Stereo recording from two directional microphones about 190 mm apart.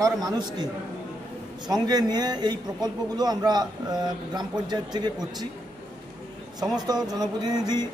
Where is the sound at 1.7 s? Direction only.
20° right (ahead or behind).